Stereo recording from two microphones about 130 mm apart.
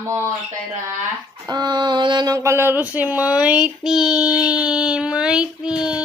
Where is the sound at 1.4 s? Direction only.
30° right (ahead or behind).